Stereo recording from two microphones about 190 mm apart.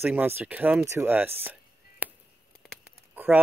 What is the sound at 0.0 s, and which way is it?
Speech, 10° right (ahead or behind).